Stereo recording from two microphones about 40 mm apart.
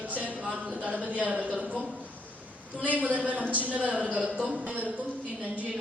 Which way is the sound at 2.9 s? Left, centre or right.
Right.